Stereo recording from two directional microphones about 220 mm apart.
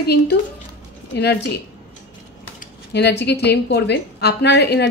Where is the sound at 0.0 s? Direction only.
45° left (ahead or behind).